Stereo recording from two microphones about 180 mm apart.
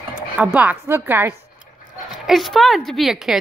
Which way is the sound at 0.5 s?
10° right (ahead or behind).